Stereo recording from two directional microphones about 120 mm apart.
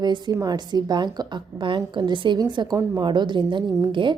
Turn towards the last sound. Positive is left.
turn(degrees=-40)  # may be behind; listen again after turning